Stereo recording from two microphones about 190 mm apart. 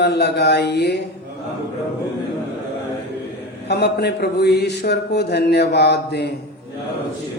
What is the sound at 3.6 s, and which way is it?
A man's voice, 60° left (ahead or behind).